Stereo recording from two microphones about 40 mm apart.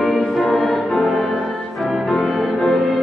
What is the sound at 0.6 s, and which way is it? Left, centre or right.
Music, left.